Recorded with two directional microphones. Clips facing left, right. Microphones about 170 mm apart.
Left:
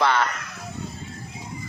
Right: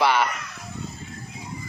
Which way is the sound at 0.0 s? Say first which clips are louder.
Right 1 dB; 10° right (ahead or behind).